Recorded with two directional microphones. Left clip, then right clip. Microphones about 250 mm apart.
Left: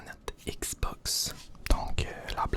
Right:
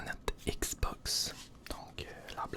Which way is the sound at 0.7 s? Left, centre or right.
Centre.